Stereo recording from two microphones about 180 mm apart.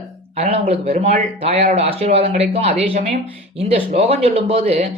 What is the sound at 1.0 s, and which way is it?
Speech, 35° right (ahead or behind).